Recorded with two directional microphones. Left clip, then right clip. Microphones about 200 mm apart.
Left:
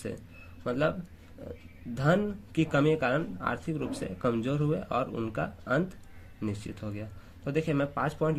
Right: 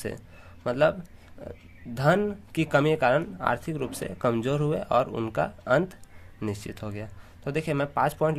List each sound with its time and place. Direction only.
0.6 s speech: 40° right (ahead or behind)
2.0 s speech: 35° right (ahead or behind)